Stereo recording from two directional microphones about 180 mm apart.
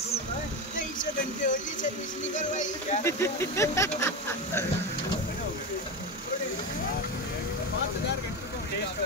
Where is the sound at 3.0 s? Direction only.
15° left (ahead or behind).